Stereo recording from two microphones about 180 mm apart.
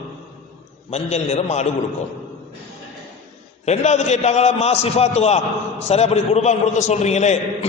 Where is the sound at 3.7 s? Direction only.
40° left (ahead or behind).